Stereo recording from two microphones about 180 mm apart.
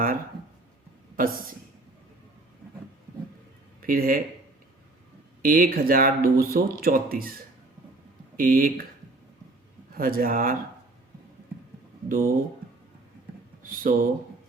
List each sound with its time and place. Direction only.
1.1 s a woman's voice: 50° right (ahead or behind)
3.8 s speech: 55° right (ahead or behind)
5.4 s speech: 55° right (ahead or behind)
8.4 s speech: 50° right (ahead or behind)
10.0 s speech: 50° right (ahead or behind)
12.0 s speech: 50° right (ahead or behind)
13.6 s speech: 50° right (ahead or behind)